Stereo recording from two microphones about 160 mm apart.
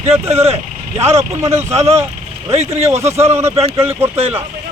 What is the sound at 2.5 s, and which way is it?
Speech, 45° right (ahead or behind).